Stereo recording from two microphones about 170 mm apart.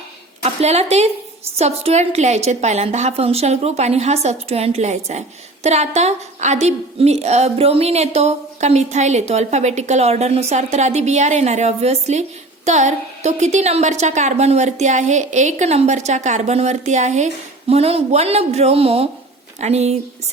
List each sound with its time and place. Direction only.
0.4 s a woman's voice: 40° right (ahead or behind)